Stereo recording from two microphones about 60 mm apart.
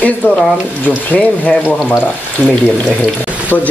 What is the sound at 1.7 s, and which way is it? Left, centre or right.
Speech, centre.